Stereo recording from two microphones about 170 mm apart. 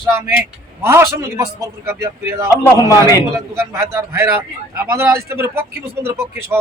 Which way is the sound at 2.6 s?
20° left (ahead or behind).